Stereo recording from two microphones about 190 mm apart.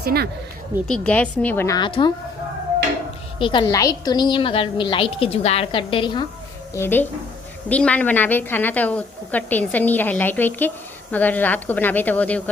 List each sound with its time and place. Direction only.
0.0 s speech: 55° right (ahead or behind)
0.9 s a woman's voice: 5° left (ahead or behind); by 2.1 s 25° left (ahead or behind)
3.3 s a woman's voice: 25° left (ahead or behind)
6.7 s a woman's voice: 10° left (ahead or behind)